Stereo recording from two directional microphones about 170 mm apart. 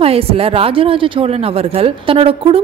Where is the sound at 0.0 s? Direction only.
35° right (ahead or behind).